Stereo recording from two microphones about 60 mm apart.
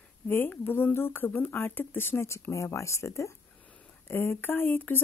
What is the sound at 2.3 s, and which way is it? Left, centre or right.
Speech, left.